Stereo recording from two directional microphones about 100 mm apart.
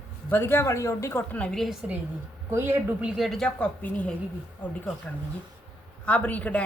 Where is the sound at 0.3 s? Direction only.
25° left (ahead or behind).